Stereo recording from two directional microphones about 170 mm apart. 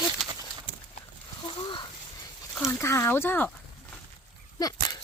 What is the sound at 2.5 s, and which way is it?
Speech, 15° left (ahead or behind).